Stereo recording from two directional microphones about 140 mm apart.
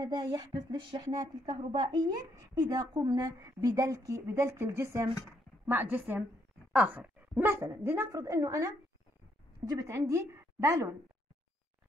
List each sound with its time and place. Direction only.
0.0 s a woman's voice: 30° right (ahead or behind)